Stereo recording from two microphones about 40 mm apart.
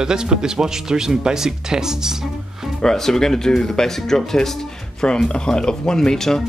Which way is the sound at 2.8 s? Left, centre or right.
Centre.